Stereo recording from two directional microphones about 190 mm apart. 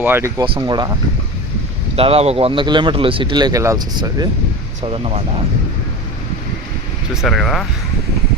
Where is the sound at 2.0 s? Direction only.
30° right (ahead or behind).